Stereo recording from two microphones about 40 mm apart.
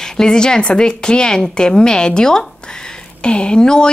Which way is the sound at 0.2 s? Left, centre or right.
Centre.